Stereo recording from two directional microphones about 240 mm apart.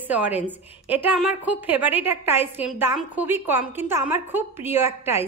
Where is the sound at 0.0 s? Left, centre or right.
Centre.